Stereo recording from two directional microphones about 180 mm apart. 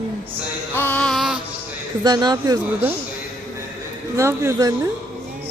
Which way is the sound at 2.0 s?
20° right (ahead or behind).